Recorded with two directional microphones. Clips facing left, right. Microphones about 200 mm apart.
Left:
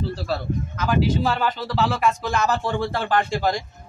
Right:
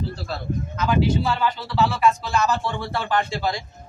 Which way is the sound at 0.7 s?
45° left (ahead or behind).